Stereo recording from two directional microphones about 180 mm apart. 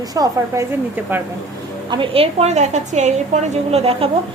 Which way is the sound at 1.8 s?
30° right (ahead or behind).